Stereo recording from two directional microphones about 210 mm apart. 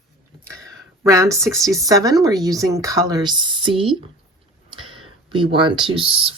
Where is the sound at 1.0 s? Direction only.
15° right (ahead or behind).